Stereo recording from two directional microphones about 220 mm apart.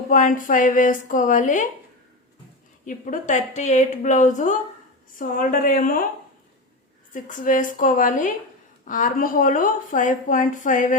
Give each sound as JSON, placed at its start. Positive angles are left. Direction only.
{"t": 0.1, "sound": "speech", "side_deg": 35}
{"t": 2.8, "sound": "speech", "side_deg": 35}
{"t": 7.1, "sound": "speech", "side_deg": 35}